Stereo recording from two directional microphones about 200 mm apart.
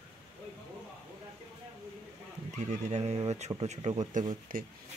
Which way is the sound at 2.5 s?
35° right (ahead or behind).